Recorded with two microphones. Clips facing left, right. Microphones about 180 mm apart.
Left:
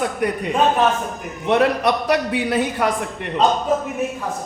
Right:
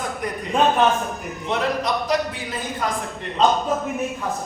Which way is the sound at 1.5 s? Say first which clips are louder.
Left 6 dB; 70° left (ahead or behind).